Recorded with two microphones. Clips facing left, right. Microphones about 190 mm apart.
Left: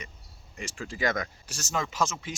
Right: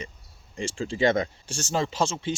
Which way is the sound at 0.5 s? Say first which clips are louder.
Right 8 dB; 30° right (ahead or behind).